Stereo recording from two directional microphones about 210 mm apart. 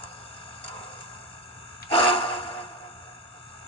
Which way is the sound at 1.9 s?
25° left (ahead or behind).